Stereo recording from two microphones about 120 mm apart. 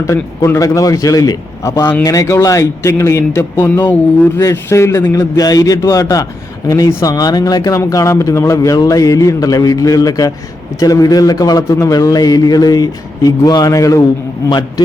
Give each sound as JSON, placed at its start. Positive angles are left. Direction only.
{"t": 0.0, "sound": "a man's voice", "side_deg": 20}